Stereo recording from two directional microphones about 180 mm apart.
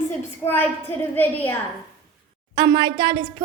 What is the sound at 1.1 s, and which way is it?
Speech, 10° left (ahead or behind).